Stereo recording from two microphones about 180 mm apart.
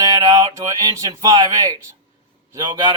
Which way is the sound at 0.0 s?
20° right (ahead or behind).